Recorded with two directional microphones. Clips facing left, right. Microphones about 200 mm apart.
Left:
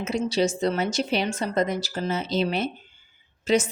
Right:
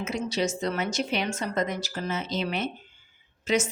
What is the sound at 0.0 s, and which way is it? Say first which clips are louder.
A woman's voice: left 4 dB; 30° left (ahead or behind).